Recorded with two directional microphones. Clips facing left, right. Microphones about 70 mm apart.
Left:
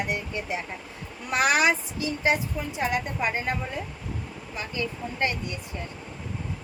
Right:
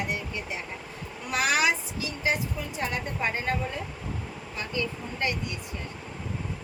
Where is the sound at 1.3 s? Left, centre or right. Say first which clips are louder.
Left 3 dB; left.